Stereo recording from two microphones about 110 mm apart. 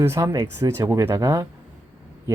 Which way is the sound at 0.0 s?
25° right (ahead or behind).